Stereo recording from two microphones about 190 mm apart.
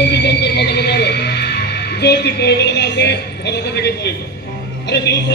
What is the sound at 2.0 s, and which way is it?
A man's voice, 60° left (ahead or behind).